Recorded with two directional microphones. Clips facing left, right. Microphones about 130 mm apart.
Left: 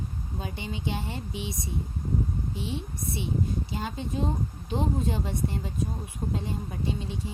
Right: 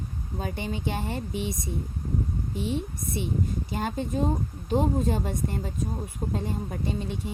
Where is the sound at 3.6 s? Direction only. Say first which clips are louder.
Right 4 dB; 50° right (ahead or behind).